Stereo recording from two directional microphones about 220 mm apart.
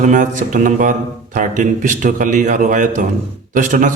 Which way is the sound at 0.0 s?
35° right (ahead or behind).